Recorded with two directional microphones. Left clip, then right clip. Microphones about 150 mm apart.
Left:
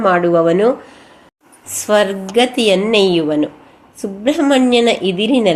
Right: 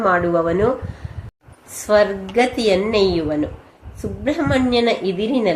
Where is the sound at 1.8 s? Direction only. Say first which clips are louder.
Left 2 dB; 30° left (ahead or behind).